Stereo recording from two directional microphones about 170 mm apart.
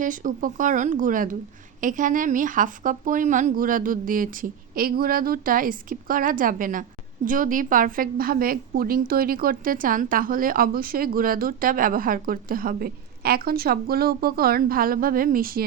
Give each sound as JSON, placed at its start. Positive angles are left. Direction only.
{"t": 0.0, "sound": "a woman's voice", "side_deg": -50}